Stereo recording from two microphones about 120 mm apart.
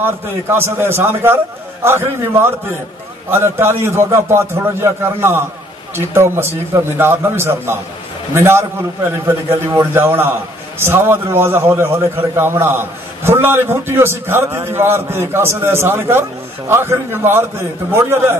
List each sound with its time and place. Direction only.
0.0 s a man's voice: 20° right (ahead or behind)